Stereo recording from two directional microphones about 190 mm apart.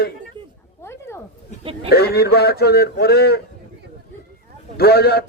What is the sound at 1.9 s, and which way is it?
A man's voice, 55° left (ahead or behind).